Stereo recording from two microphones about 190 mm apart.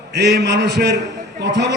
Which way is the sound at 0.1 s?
60° right (ahead or behind).